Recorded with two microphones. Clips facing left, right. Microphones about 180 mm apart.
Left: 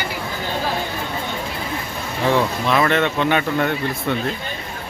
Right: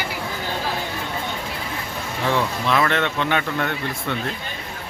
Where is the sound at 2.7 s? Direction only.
10° left (ahead or behind).